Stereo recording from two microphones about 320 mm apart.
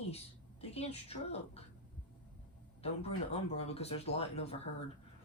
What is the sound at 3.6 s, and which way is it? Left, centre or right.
Speech, centre.